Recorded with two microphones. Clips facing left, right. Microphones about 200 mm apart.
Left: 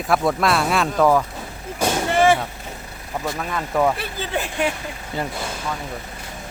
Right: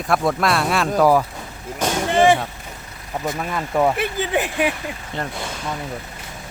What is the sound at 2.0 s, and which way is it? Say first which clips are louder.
Vehicle: right 2 dB; 20° right (ahead or behind).